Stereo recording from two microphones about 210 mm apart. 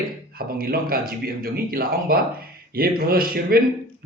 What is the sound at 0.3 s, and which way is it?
Speech, 45° right (ahead or behind).